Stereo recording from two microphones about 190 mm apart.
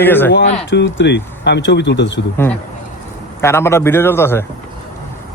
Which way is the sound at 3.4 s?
15° left (ahead or behind).